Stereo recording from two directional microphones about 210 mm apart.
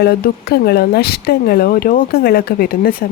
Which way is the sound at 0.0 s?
50° left (ahead or behind).